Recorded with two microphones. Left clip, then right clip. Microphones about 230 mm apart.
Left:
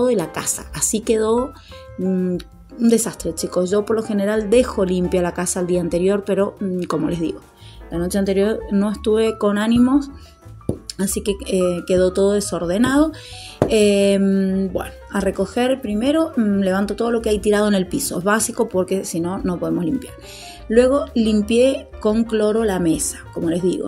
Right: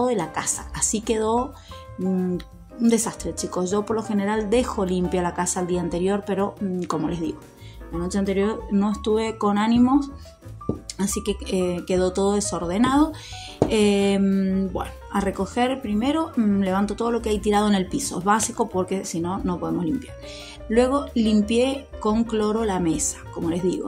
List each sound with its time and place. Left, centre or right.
0.0 s speech: left